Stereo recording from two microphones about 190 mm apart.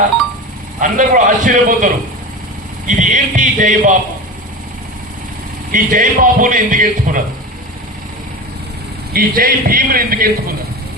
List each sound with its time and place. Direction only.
0.8 s a man's voice: 45° right (ahead or behind)
5.7 s a man's voice: 45° right (ahead or behind)
9.1 s a man's voice: 50° right (ahead or behind)